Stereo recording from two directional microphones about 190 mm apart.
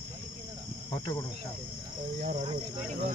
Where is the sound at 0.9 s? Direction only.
25° left (ahead or behind).